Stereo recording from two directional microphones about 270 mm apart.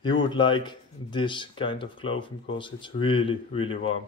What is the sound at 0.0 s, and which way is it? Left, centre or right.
A man's voice, centre.